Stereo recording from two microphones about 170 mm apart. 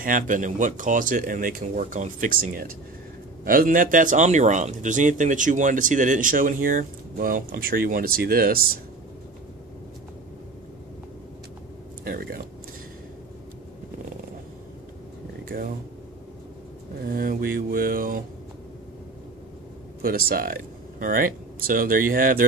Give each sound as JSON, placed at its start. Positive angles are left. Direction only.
{"t": 0.0, "sound": "speech", "side_deg": -50}
{"t": 12.0, "sound": "speech", "side_deg": -60}
{"t": 15.4, "sound": "a sound", "side_deg": -60}
{"t": 17.0, "sound": "speech", "side_deg": -60}
{"t": 20.0, "sound": "speech", "side_deg": -60}